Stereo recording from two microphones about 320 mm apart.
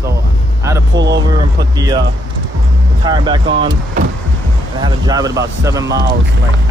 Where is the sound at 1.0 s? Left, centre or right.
Right.